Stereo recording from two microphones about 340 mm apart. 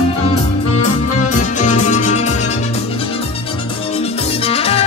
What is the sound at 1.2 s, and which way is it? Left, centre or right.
Music, left.